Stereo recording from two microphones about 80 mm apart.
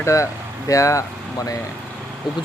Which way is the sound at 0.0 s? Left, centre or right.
Left.